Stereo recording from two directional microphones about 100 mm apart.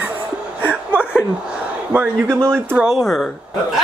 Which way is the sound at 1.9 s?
20° right (ahead or behind).